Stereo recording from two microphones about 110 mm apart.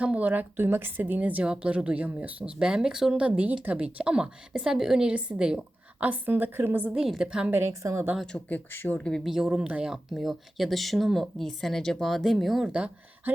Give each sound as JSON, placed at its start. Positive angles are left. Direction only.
{"t": 0.0, "sound": "speech", "side_deg": -10}
{"t": 6.9, "sound": "speech", "side_deg": -5}
{"t": 7.5, "sound": "a woman's voice", "side_deg": -25}
{"t": 8.4, "sound": "speech", "side_deg": 15}